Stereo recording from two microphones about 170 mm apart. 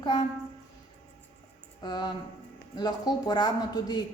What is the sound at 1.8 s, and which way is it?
A woman's voice, 25° left (ahead or behind).